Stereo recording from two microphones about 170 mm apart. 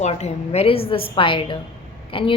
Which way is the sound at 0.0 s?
40° left (ahead or behind).